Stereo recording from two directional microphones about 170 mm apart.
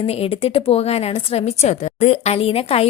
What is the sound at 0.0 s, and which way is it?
A woman's voice, 35° left (ahead or behind).